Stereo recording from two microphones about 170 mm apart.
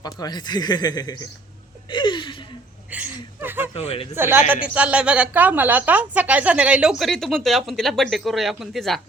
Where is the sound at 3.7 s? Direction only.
35° left (ahead or behind).